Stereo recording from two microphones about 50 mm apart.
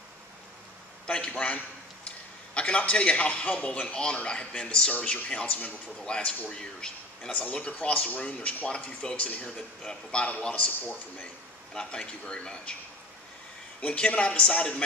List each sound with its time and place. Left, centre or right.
1.0 s a man's voice: centre
5.9 s a man's voice: centre
10.5 s a man's voice: left
11.7 s speech: centre
13.7 s a man's voice: left